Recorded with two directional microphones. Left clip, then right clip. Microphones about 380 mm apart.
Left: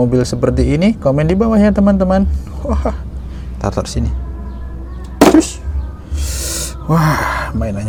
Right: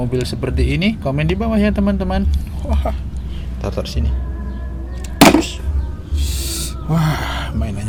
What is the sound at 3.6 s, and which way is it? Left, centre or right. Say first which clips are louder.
Speech: left 5 dB; left.